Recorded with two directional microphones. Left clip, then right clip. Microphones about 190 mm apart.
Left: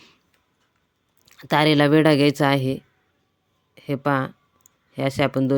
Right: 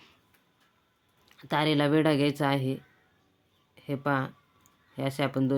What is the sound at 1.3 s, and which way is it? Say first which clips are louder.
Speech: left 9 dB; 40° left (ahead or behind).